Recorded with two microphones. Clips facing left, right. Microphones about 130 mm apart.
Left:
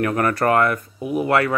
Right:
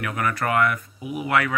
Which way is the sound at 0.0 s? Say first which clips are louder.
Left 6 dB; 40° left (ahead or behind).